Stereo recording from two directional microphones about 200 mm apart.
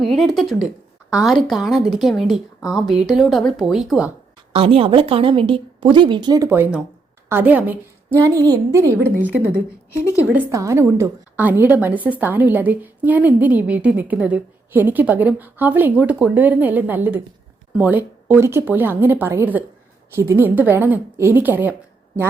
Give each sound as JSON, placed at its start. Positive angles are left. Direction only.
{"t": 0.0, "sound": "speech", "side_deg": 0}
{"t": 4.5, "sound": "a woman's voice", "side_deg": -30}